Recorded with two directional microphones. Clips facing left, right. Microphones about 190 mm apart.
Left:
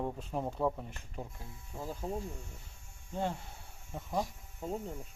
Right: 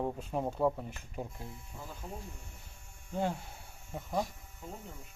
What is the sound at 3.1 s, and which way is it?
Speech, 5° right (ahead or behind).